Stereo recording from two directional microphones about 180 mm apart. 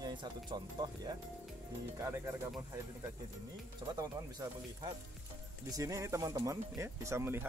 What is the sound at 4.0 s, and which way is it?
Speech, 20° right (ahead or behind).